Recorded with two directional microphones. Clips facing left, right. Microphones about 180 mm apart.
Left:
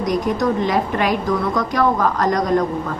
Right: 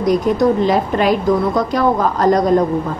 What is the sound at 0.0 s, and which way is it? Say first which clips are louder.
A woman's voice: right 5 dB; 30° right (ahead or behind).